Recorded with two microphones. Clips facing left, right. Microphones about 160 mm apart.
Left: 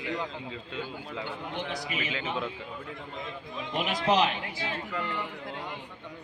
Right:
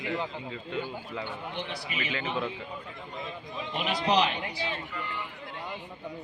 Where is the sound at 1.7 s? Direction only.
45° left (ahead or behind).